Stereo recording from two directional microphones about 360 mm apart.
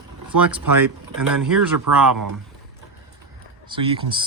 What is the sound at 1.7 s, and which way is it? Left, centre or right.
Speech, right.